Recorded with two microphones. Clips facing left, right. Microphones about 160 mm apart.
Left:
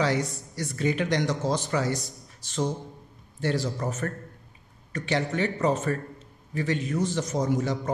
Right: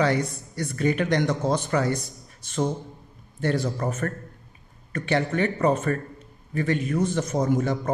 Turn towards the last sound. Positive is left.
turn(degrees=-55)  # may be behind; listen again after turning